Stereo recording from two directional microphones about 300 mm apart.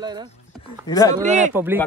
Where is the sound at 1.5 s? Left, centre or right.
Centre.